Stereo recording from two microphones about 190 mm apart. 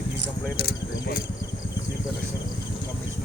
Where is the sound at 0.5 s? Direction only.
55° left (ahead or behind).